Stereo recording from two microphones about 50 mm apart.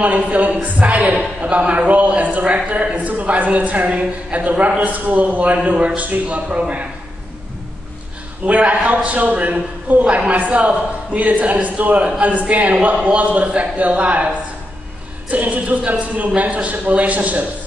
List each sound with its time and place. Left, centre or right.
0.0 s a woman's voice: right
8.5 s a woman's voice: right